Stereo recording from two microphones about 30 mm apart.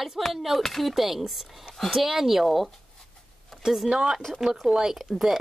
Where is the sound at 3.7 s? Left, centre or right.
Centre.